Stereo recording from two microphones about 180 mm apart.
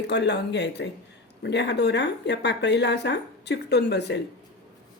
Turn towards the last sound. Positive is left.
turn(degrees=70)  # may be behind; listen again after turning